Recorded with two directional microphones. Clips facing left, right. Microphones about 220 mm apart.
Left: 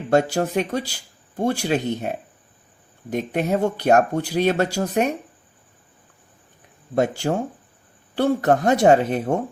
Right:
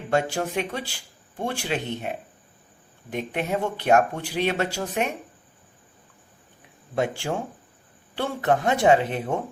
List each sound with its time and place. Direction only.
0.1 s speech: 40° left (ahead or behind)
6.9 s speech: 40° left (ahead or behind)